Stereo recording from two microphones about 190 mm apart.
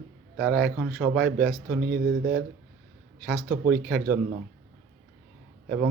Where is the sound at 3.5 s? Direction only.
50° right (ahead or behind).